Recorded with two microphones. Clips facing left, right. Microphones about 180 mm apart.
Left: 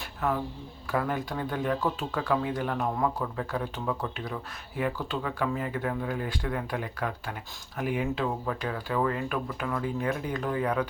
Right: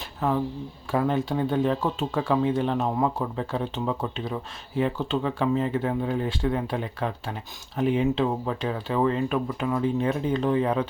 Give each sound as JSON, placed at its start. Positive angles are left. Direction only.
{"t": 0.2, "sound": "speech", "side_deg": -30}